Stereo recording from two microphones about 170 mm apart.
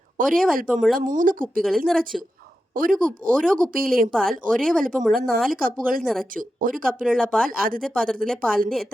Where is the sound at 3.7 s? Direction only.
55° right (ahead or behind).